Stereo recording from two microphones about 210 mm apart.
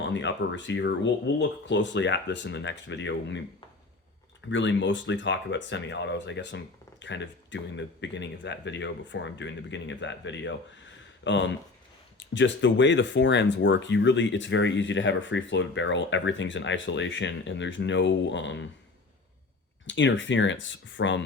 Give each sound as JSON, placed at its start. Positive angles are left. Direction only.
{"t": 0.0, "sound": "speech", "side_deg": 60}
{"t": 4.4, "sound": "speech", "side_deg": 60}
{"t": 19.9, "sound": "speech", "side_deg": 60}